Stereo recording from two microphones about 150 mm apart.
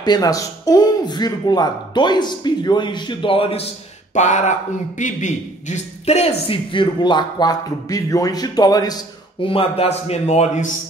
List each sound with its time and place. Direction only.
0.0 s speech: 25° left (ahead or behind)
4.1 s a man's voice: 55° left (ahead or behind)